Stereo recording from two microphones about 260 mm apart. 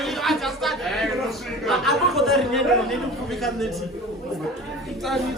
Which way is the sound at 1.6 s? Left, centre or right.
Centre.